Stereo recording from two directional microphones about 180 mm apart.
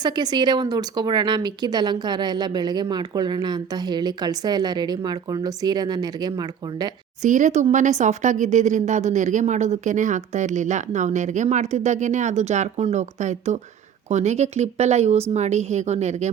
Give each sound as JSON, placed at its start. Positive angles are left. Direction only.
{"t": 0.0, "sound": "speech", "side_deg": -25}
{"t": 7.2, "sound": "speech", "side_deg": -45}